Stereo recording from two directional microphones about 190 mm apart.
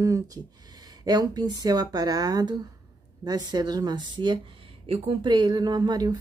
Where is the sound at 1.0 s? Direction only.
20° right (ahead or behind).